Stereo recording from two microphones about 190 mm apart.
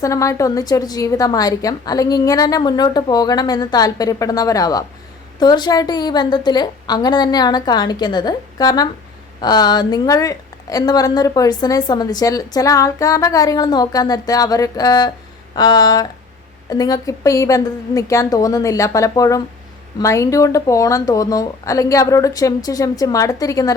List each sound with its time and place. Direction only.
0.0 s a woman's voice: 15° left (ahead or behind)